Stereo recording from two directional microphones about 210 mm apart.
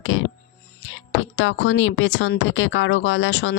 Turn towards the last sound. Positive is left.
turn(degrees=55)  # may be behind; listen again after turning